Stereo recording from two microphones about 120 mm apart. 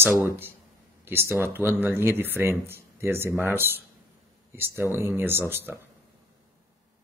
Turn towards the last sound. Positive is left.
turn(degrees=-20)  # may be behind; listen again after turning